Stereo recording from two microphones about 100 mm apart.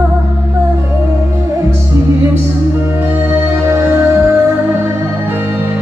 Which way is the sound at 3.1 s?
20° right (ahead or behind).